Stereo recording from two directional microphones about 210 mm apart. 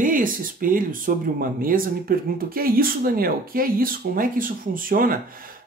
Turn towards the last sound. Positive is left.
turn(degrees=-40)  # may be behind; listen again after turning